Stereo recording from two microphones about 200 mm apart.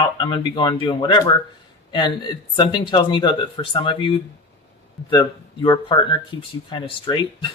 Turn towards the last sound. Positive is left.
turn(degrees=25)  # may be behind; listen again after turning